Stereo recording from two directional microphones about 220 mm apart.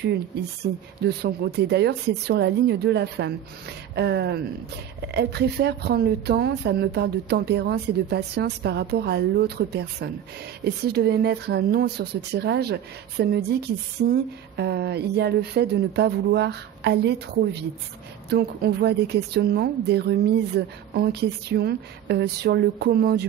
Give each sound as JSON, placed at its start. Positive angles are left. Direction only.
{"t": 1.0, "sound": "speech", "side_deg": -45}